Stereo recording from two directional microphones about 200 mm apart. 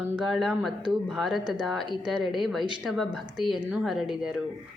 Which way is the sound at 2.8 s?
Centre (ahead or behind).